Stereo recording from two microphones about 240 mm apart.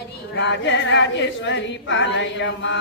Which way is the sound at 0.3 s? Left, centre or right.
Left.